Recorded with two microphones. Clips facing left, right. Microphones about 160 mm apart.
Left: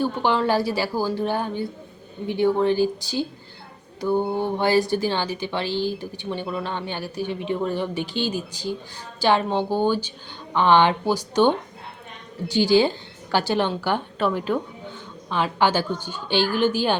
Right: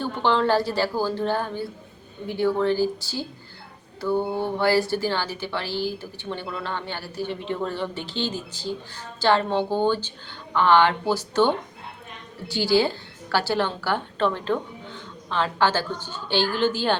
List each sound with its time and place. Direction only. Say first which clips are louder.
0.0 s a woman's voice: left 1 dB; 10° left (ahead or behind)